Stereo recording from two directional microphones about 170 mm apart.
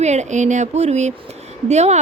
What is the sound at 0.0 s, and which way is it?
Speech, 40° right (ahead or behind).